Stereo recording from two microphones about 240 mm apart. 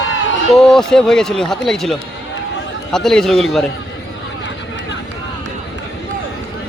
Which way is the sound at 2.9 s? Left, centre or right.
Centre.